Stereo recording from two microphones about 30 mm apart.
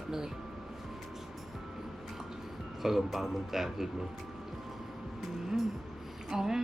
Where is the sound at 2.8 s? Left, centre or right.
Centre.